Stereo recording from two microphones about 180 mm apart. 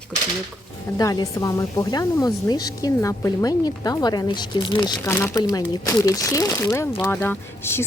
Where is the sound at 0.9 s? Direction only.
20° left (ahead or behind).